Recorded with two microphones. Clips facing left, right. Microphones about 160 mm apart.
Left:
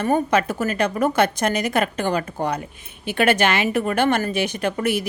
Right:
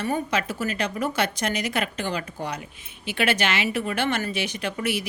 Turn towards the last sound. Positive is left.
turn(degrees=50)  # may be behind; listen again after turning